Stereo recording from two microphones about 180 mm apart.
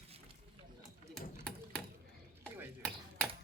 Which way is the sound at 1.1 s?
5° left (ahead or behind).